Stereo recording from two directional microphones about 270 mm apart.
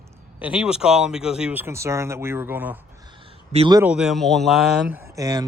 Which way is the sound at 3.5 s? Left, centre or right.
Centre.